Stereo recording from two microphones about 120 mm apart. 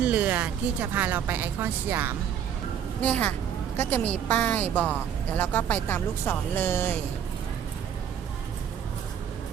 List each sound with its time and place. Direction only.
0.0 s a woman's voice: 10° right (ahead or behind)
3.0 s speech: 10° left (ahead or behind)